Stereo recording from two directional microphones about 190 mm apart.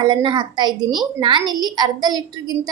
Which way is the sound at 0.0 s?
25° right (ahead or behind).